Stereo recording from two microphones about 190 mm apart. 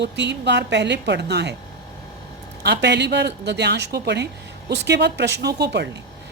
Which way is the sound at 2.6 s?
65° right (ahead or behind).